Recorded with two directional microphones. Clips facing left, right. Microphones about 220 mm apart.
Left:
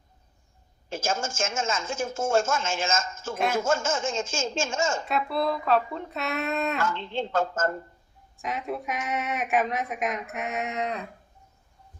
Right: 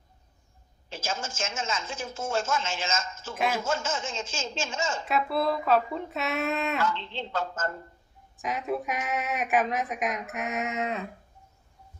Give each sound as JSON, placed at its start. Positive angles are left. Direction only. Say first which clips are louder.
{"t": 0.9, "sound": "speech", "louder": "left 5 dB", "side_deg": 45}
{"t": 5.0, "sound": "a woman's voice", "louder": "even", "side_deg": 0}
{"t": 6.7, "sound": "speech", "louder": "left 1 dB", "side_deg": 50}
{"t": 8.4, "sound": "a woman's voice", "louder": "right 1 dB", "side_deg": 0}